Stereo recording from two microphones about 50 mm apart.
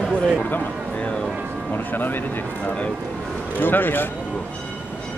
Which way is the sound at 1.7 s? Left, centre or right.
Left.